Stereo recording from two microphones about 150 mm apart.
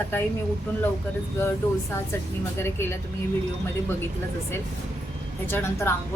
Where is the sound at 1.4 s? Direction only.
15° left (ahead or behind).